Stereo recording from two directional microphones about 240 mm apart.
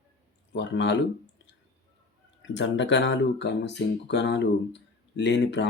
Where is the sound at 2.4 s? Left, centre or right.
Left.